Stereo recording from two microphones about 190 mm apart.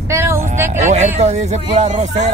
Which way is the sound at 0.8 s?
35° right (ahead or behind).